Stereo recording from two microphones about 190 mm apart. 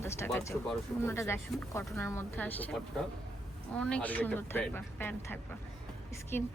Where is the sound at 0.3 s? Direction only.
10° left (ahead or behind).